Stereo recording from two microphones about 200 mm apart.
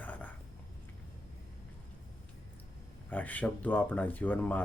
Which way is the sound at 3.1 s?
10° left (ahead or behind).